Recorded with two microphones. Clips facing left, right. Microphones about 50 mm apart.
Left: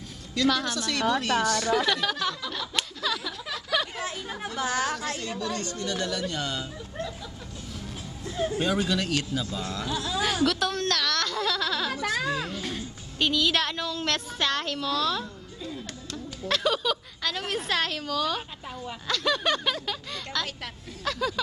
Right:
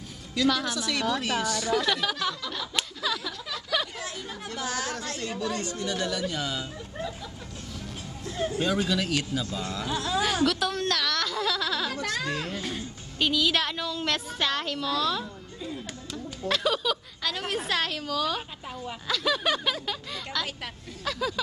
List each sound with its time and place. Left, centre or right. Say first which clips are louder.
0.4 s a woman's voice: even; centre
3.9 s a woman's voice: left 3 dB; left
5.3 s speech: right 1 dB; centre
8.5 s a woman's voice: right 1 dB; centre
9.8 s speech: right 3 dB; right
10.2 s a woman's voice: left 2 dB; centre
11.9 s speech: left 2 dB; centre
12.5 s a woman's voice: even; centre